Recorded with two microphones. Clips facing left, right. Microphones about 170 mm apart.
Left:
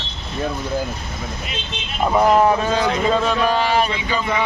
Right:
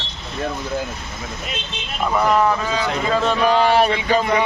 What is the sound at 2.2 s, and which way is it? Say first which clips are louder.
Speech: left 3 dB; 25° left (ahead or behind).